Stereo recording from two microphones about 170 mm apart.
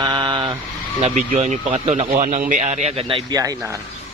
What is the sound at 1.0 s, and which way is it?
Speech, 40° right (ahead or behind).